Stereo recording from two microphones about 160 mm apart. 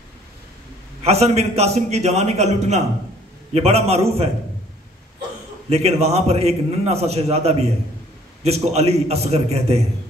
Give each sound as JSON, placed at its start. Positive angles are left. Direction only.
{"t": 1.0, "sound": "a man's voice", "side_deg": -40}
{"t": 5.7, "sound": "a man's voice", "side_deg": -40}